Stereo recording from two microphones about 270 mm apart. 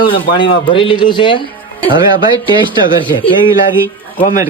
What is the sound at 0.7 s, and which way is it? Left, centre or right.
Speech, centre.